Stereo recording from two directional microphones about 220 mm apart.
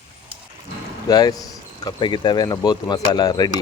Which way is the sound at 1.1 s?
15° left (ahead or behind).